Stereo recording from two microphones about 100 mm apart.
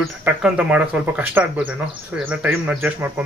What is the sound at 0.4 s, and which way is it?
Speech, 10° right (ahead or behind).